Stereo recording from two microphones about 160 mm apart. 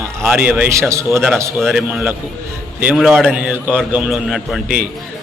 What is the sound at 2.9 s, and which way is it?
Speech, centre (ahead or behind).